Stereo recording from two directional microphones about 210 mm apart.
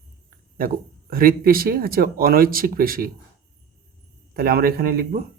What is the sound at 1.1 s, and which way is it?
Speech, 45° right (ahead or behind).